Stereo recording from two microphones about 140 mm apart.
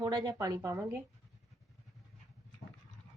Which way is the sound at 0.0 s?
30° right (ahead or behind).